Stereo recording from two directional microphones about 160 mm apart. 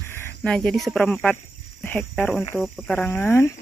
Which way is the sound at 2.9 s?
15° left (ahead or behind).